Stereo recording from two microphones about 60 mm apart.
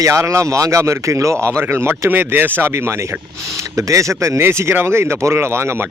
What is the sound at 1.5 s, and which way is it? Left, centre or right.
Speech, right.